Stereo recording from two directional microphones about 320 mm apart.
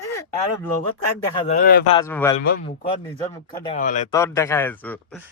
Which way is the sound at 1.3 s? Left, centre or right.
Left.